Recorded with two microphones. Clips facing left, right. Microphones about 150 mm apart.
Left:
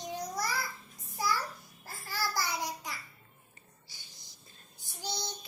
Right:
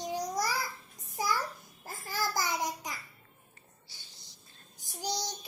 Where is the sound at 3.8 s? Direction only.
15° left (ahead or behind).